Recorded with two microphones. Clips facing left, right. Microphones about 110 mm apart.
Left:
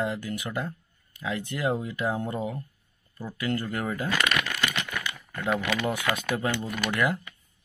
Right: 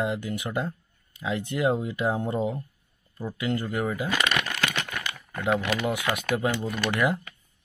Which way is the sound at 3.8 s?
5° right (ahead or behind).